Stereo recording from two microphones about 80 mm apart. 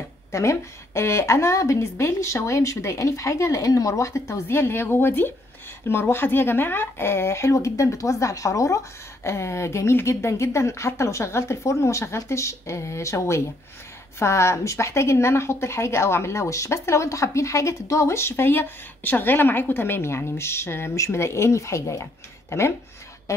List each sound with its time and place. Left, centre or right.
0.3 s a woman's voice: left